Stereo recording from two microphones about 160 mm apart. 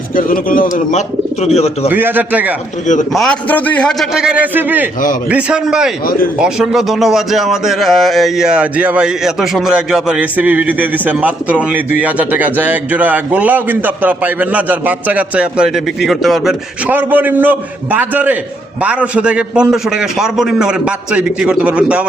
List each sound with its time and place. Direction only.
0.2 s speech: 60° left (ahead or behind); by 1.9 s 40° left (ahead or behind)
1.9 s a man's voice: 10° right (ahead or behind)
2.8 s a man's voice: 50° left (ahead or behind)
3.1 s a man's voice: 5° left (ahead or behind)
16.9 s a man's voice: 10° right (ahead or behind)